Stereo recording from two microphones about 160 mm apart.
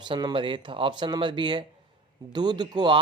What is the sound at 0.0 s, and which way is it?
A man's voice, 25° right (ahead or behind).